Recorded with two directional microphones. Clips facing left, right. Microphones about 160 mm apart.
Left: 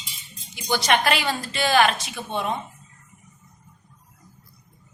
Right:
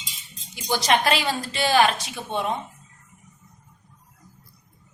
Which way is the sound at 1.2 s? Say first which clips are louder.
Even; 5° right (ahead or behind).